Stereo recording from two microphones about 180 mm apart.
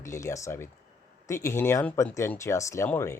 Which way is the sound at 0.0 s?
15° left (ahead or behind).